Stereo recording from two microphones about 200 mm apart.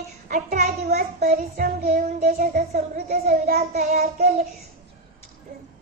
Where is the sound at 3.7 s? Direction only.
35° right (ahead or behind).